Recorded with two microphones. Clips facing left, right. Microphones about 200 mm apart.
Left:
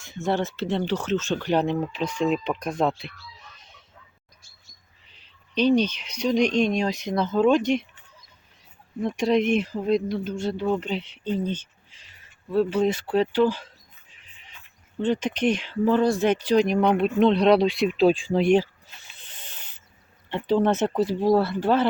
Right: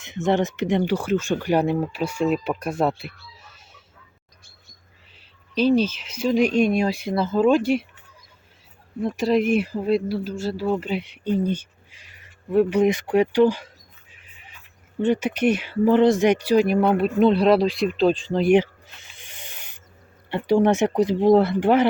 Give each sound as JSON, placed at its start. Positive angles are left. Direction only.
{"t": 0.0, "sound": "speech", "side_deg": -20}
{"t": 5.1, "sound": "speech", "side_deg": -5}
{"t": 9.0, "sound": "speech", "side_deg": -5}
{"t": 14.1, "sound": "music", "side_deg": -5}
{"t": 15.0, "sound": "speech", "side_deg": -10}
{"t": 19.2, "sound": "a sound", "side_deg": -10}
{"t": 20.3, "sound": "speech", "side_deg": -10}